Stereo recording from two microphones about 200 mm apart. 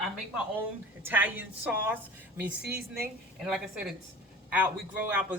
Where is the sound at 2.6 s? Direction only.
50° right (ahead or behind).